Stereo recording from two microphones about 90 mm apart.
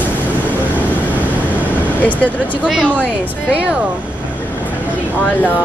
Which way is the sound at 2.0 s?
15° left (ahead or behind).